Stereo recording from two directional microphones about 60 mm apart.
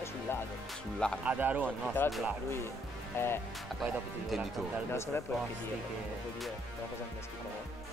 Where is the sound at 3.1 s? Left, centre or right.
Left.